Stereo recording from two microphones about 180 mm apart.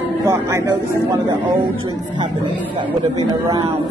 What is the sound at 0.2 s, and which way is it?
Speech, 20° right (ahead or behind).